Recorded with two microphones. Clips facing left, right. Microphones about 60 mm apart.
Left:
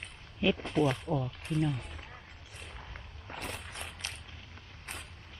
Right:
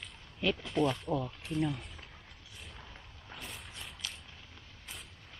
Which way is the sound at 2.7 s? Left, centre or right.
Left.